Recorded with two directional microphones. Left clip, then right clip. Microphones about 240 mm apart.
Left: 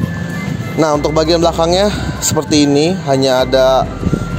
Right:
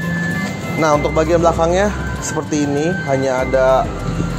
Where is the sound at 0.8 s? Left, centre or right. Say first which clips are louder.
Left 2 dB; left.